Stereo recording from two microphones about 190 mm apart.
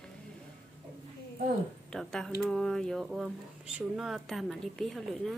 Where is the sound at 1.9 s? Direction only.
5° left (ahead or behind).